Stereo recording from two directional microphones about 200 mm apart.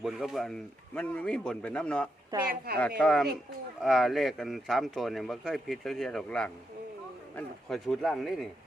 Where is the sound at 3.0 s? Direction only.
5° left (ahead or behind).